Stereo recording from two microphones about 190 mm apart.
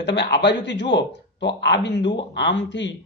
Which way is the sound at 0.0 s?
65° left (ahead or behind).